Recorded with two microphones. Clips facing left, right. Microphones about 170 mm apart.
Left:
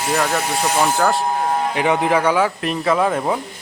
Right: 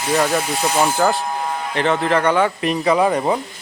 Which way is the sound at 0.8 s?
Centre (ahead or behind).